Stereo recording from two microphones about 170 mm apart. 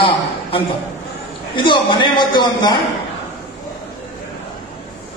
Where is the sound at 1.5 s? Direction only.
30° left (ahead or behind).